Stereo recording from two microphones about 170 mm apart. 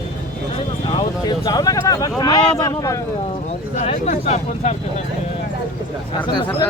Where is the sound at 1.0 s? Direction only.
25° left (ahead or behind).